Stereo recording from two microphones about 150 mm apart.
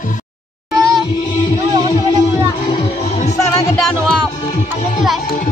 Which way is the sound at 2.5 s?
30° left (ahead or behind).